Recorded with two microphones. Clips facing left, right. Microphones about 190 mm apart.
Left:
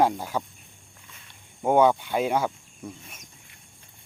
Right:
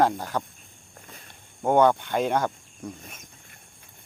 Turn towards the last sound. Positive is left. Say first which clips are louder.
# right 2 dB
turn(degrees=5)  # may be behind; listen again after turning